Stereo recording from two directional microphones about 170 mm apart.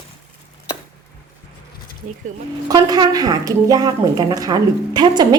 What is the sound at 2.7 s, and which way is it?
A woman's voice, 25° right (ahead or behind).